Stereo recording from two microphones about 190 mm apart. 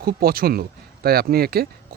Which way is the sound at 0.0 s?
55° right (ahead or behind).